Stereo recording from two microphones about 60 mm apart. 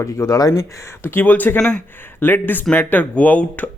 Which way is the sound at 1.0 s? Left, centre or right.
Left.